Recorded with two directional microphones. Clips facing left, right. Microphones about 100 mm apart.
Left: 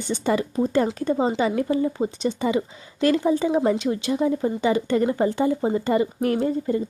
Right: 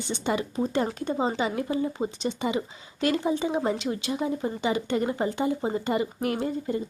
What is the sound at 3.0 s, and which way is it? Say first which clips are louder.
Speech: left 5 dB; 40° left (ahead or behind).